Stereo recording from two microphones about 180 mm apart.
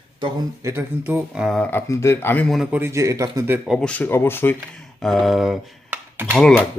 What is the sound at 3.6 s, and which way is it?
Speech, centre (ahead or behind).